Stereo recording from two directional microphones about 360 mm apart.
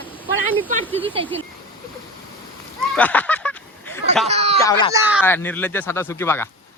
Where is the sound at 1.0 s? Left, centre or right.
Centre.